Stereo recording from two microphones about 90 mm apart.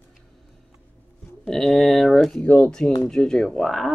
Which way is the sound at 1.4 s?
5° left (ahead or behind).